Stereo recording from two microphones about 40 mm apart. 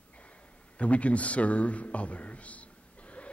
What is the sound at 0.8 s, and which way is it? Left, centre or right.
A man's voice, left.